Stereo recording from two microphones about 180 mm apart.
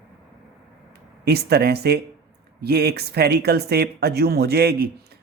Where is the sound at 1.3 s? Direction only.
60° right (ahead or behind).